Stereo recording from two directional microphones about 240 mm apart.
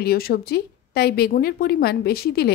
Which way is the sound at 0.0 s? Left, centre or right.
Left.